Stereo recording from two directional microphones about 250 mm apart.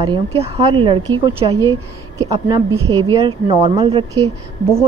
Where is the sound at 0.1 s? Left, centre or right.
Right.